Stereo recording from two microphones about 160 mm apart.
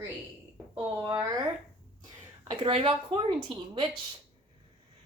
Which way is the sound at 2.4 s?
30° right (ahead or behind).